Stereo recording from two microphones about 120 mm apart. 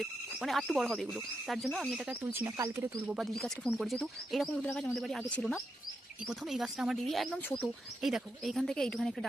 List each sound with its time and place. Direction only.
0.0 s speech: centre (ahead or behind)
2.0 s speech: 20° right (ahead or behind)
3.1 s speech: centre (ahead or behind)